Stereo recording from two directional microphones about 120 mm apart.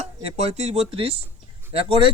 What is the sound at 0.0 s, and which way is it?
Speech, 55° right (ahead or behind).